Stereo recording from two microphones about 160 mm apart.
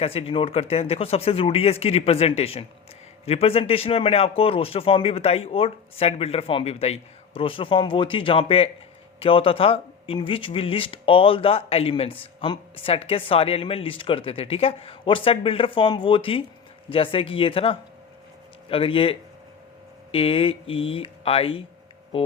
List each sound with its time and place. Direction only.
0.0 s speech: 35° left (ahead or behind)